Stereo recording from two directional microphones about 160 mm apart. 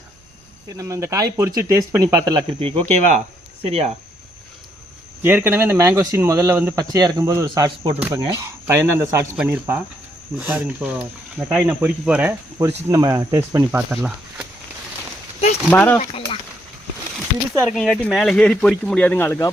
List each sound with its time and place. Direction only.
0.8 s speech: 20° right (ahead or behind)
2.6 s speech: 40° right (ahead or behind)
5.2 s speech: 10° right (ahead or behind)
7.9 s speech: 10° right (ahead or behind)
12.5 s speech: 20° right (ahead or behind)
13.9 s speech: 5° right (ahead or behind)
15.7 s speech: 10° left (ahead or behind)
16.0 s a sound: 35° left (ahead or behind)
17.7 s speech: 5° left (ahead or behind)